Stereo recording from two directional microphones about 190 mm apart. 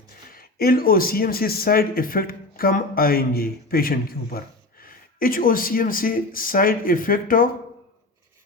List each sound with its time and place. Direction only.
0.3 s speech: 50° left (ahead or behind)